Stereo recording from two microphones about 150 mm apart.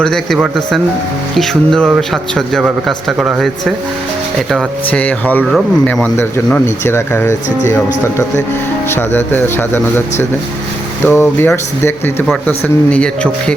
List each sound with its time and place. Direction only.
0.0 s a man's voice: 5° left (ahead or behind)
1.4 s a man's voice: 5° left (ahead or behind)
4.9 s speech: 10° left (ahead or behind)
8.9 s speech: 15° left (ahead or behind)